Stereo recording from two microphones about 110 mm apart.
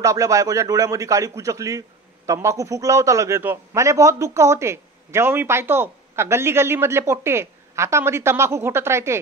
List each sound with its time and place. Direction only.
0.0 s a man's voice: 30° right (ahead or behind)